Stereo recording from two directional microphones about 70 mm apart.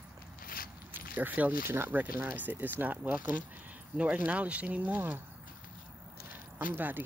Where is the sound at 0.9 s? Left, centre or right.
Right.